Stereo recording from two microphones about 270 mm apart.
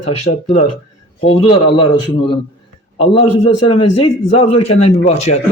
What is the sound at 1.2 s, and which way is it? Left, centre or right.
Speech, left.